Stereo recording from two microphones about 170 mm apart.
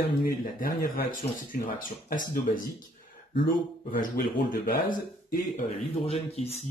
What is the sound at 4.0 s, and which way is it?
Speech, 50° left (ahead or behind).